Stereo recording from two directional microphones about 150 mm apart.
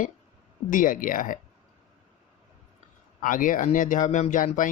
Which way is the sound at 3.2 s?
60° left (ahead or behind).